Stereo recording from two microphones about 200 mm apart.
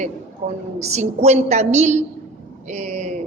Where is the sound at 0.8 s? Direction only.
35° right (ahead or behind).